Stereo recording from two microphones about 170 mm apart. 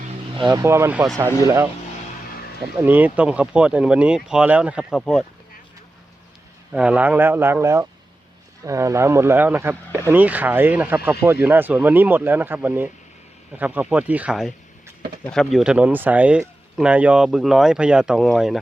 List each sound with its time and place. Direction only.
0.5 s speech: 15° right (ahead or behind)
2.7 s speech: 10° right (ahead or behind)
6.7 s speech: 5° right (ahead or behind)